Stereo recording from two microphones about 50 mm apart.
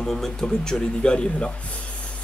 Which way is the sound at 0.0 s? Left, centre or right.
Centre.